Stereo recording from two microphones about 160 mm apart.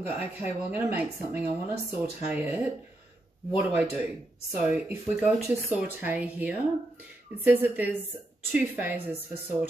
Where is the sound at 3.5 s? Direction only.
5° right (ahead or behind).